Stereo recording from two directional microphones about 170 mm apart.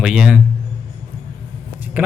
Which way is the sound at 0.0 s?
5° right (ahead or behind).